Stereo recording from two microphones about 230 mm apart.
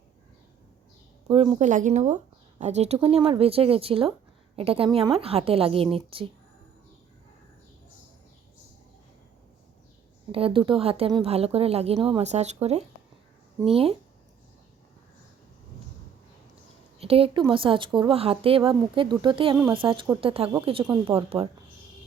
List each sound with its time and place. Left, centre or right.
1.3 s speech: right
10.3 s speech: right
17.0 s speech: right